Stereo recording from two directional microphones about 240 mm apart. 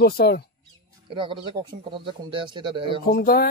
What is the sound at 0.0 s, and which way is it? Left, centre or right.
Speech, left.